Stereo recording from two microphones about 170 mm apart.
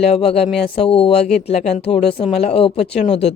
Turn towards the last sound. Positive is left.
turn(degrees=40)  # may be behind; listen again after turning